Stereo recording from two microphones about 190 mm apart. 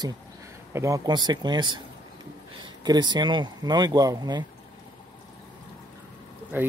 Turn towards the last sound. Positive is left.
turn(degrees=-10)  # may be behind; listen again after turning